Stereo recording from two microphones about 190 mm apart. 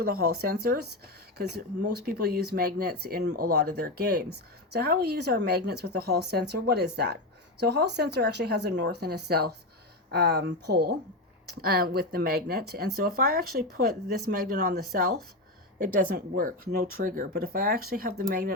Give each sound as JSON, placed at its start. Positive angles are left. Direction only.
{"t": 0.0, "sound": "speech", "side_deg": -55}